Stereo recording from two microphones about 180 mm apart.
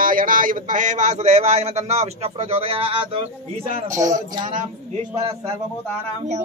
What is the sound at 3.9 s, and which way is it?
Speech, 20° right (ahead or behind).